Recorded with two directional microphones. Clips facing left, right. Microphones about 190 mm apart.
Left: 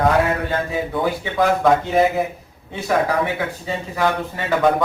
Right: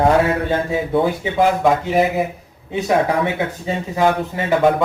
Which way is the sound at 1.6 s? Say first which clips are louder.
Even; 5° right (ahead or behind).